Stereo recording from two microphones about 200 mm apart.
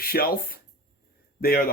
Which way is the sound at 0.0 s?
50° left (ahead or behind).